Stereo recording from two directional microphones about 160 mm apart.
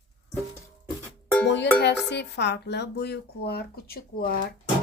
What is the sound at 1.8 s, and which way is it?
Speech, 90° left.